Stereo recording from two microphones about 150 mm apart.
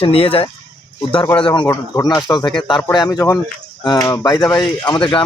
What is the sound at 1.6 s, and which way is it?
Speech, 20° left (ahead or behind).